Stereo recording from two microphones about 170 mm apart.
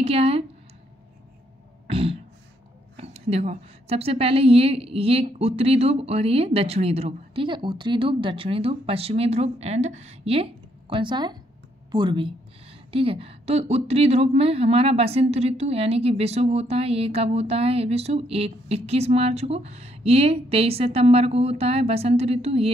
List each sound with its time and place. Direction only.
0.0 s speech: 35° right (ahead or behind)
1.9 s throat clearing: 35° right (ahead or behind)
3.0 s a woman's voice: 40° right (ahead or behind)